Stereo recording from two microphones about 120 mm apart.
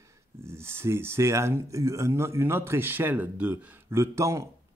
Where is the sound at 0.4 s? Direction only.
20° right (ahead or behind).